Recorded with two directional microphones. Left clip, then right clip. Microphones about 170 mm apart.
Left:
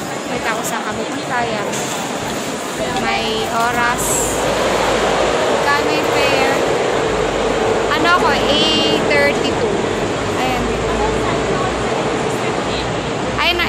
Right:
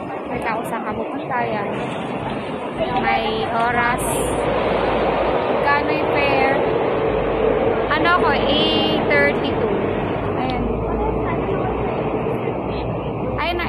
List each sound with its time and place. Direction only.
7.9 s vehicle: 20° left (ahead or behind)